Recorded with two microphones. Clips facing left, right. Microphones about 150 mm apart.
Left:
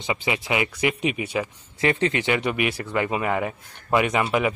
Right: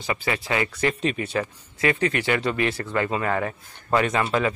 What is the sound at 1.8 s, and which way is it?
Speech, 25° left (ahead or behind).